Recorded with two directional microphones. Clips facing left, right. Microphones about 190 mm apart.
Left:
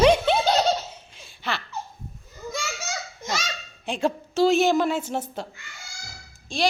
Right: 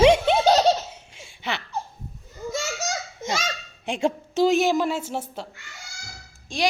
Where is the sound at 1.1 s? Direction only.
20° right (ahead or behind).